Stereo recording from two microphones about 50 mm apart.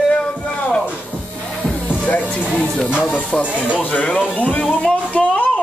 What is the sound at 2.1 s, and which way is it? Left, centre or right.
Speech, left.